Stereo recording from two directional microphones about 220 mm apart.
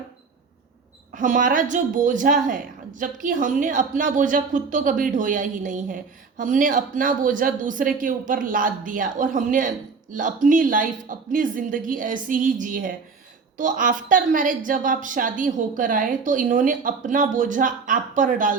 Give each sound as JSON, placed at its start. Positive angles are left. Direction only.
{"t": 1.1, "sound": "speech", "side_deg": -35}